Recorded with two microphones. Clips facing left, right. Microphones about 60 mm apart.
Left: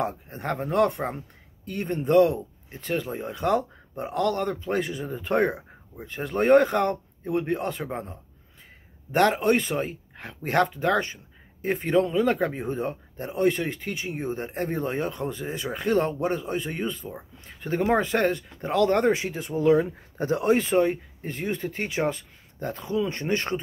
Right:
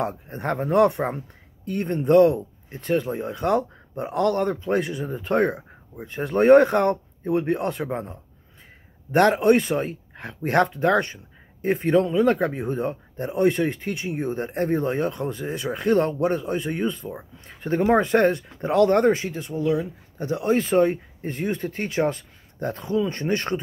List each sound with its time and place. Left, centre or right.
0.0 s speech: centre
19.6 s speech: left
20.5 s speech: centre